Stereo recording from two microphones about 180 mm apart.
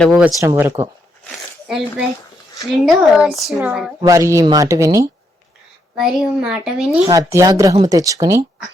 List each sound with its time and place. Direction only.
0.0 s a child's voice: centre (ahead or behind)
0.3 s a child's voice: 15° right (ahead or behind)
4.0 s speech: 15° right (ahead or behind)
6.0 s a child's voice: 5° right (ahead or behind)
7.1 s speech: 20° right (ahead or behind)